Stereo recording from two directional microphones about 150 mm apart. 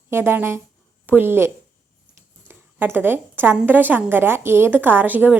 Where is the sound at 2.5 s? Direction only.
15° right (ahead or behind).